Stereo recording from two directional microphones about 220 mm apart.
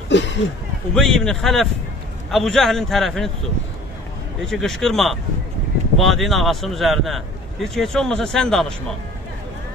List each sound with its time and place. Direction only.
0.1 s a sound: 55° left (ahead or behind)
0.9 s speech: centre (ahead or behind)
4.5 s speech: centre (ahead or behind)